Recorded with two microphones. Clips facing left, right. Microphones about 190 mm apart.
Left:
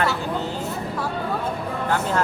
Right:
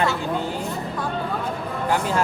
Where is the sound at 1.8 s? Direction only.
10° right (ahead or behind).